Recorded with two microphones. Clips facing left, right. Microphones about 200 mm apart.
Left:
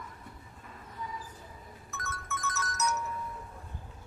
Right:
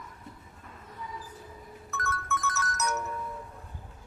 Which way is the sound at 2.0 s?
65° right (ahead or behind).